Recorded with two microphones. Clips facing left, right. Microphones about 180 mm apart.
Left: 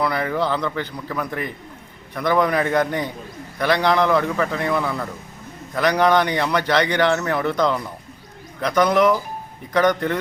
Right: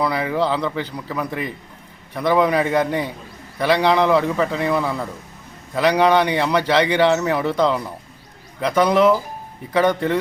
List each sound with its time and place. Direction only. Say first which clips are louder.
0.0 s speech: right 1 dB; 10° right (ahead or behind)